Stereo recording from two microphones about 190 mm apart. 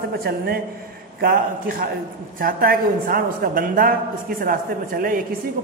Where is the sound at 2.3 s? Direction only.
50° right (ahead or behind).